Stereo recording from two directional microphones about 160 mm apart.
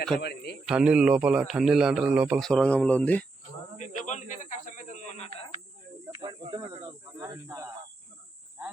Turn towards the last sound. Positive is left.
turn(degrees=-20)  # may be behind; listen again after turning